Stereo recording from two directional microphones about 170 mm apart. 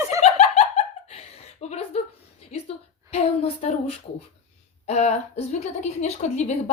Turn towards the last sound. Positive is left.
turn(degrees=40)  # may be behind; listen again after turning